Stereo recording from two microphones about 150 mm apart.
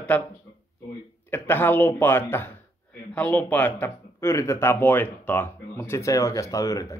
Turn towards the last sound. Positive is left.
turn(degrees=20)  # may be behind; listen again after turning